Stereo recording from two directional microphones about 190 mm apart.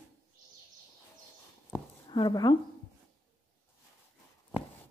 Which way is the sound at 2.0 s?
20° left (ahead or behind).